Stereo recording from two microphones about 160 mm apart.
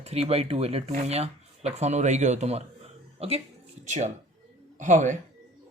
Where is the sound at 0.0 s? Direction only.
40° right (ahead or behind).